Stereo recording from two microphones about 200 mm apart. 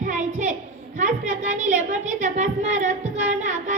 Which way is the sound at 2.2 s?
40° right (ahead or behind).